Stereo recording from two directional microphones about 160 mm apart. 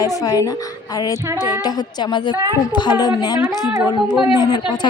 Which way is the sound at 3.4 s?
10° right (ahead or behind).